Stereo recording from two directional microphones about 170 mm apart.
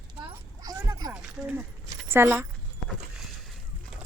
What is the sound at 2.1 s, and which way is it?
Speech, 15° right (ahead or behind).